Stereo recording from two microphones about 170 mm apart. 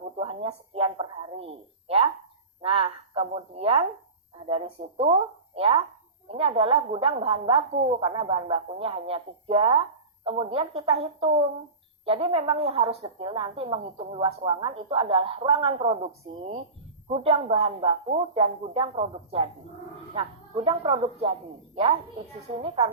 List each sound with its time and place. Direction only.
0.2 s a woman's voice: 35° right (ahead or behind)
22.6 s a woman's voice: 35° right (ahead or behind)